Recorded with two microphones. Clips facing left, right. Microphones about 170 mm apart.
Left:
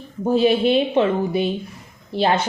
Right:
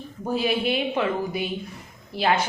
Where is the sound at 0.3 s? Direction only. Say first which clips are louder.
Left 8 dB; 25° left (ahead or behind).